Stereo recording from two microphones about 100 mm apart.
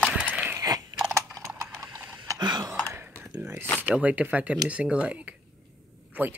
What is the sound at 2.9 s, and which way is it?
Computer keyboard, 20° right (ahead or behind).